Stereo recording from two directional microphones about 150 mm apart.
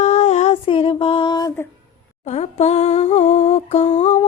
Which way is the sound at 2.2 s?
45° left (ahead or behind).